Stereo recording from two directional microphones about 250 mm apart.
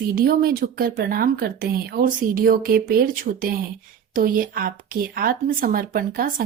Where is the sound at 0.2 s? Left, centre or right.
Right.